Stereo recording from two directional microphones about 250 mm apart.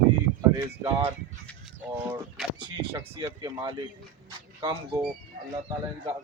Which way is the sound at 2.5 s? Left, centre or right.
Centre.